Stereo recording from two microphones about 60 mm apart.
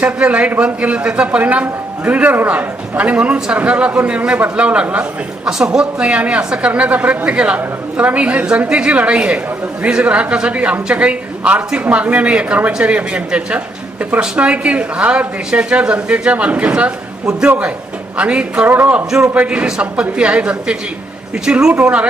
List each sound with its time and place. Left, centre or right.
0.0 s a woman's voice: right
5.5 s a woman's voice: centre
18.7 s speech: right
19.3 s a woman's voice: right